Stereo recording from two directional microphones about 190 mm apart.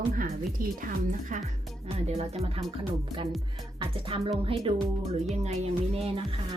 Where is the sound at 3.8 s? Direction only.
30° right (ahead or behind).